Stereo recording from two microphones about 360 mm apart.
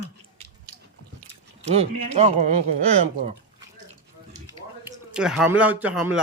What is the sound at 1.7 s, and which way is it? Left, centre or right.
Speech, centre.